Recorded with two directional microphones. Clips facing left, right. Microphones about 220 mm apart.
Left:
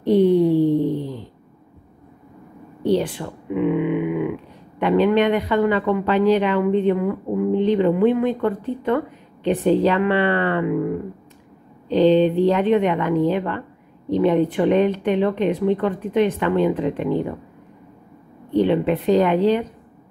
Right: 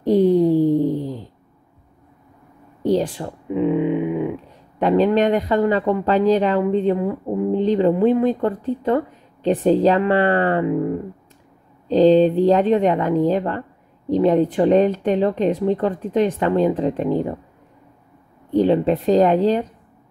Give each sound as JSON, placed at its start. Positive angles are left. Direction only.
{"t": 0.0, "sound": "a sound", "side_deg": -40}
{"t": 2.8, "sound": "speech", "side_deg": -40}
{"t": 11.9, "sound": "speech", "side_deg": -40}
{"t": 18.5, "sound": "speech", "side_deg": -40}